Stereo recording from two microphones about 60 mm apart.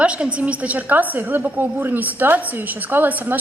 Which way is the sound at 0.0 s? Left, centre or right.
Centre.